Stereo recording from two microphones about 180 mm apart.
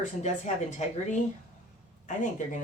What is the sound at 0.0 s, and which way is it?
Speech, 40° left (ahead or behind).